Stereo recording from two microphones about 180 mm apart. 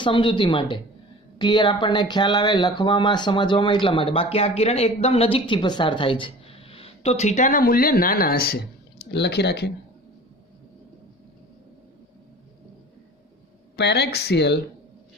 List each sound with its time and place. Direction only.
0.0 s speech: 25° left (ahead or behind); by 8.5 s 55° left (ahead or behind)
9.1 s speech: 65° left (ahead or behind)
13.7 s speech: 70° left (ahead or behind)